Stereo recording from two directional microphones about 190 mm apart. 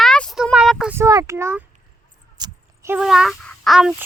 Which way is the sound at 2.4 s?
15° right (ahead or behind).